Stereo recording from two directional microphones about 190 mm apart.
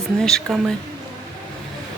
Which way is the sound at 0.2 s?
5° left (ahead or behind).